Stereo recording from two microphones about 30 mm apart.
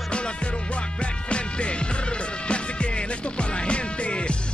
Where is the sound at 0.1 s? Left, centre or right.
Left.